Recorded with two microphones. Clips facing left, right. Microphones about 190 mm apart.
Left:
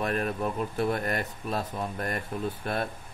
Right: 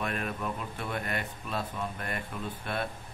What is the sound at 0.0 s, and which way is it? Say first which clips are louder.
Speech: left 5 dB; 40° left (ahead or behind).